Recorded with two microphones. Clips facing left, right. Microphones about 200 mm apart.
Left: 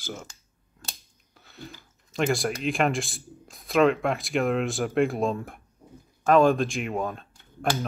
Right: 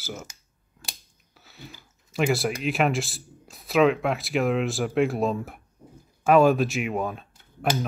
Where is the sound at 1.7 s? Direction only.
5° right (ahead or behind).